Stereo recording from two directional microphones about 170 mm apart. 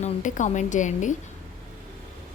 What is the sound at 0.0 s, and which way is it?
A woman's voice, 45° left (ahead or behind).